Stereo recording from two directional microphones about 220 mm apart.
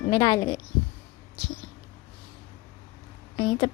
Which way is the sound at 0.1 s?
20° left (ahead or behind).